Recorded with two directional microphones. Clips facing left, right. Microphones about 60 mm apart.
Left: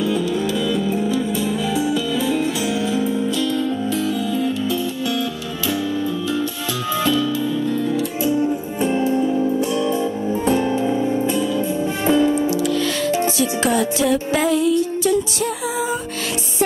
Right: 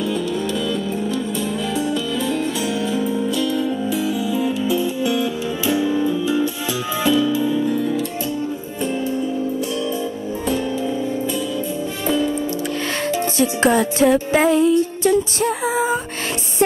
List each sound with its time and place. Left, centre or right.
0.0 s music: centre
8.8 s music: centre
9.1 s music: left
12.4 s music: right